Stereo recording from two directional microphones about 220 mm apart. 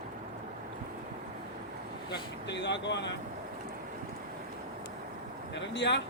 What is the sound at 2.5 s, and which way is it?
Speech, 50° left (ahead or behind).